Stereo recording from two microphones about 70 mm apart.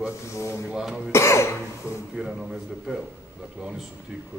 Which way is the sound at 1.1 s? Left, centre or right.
Left.